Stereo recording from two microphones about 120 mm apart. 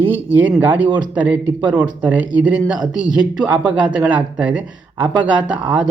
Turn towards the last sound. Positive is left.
turn(degrees=-10)  # may be behind; listen again after turning